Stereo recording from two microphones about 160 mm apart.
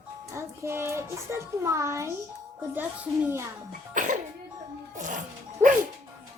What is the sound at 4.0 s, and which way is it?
Speech, 55° right (ahead or behind).